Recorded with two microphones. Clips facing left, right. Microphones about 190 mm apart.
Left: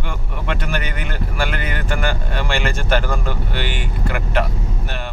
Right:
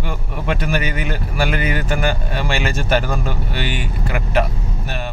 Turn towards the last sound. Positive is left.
turn(degrees=-10)  # may be behind; listen again after turning